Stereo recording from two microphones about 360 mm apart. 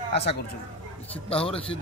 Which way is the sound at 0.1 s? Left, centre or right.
Left.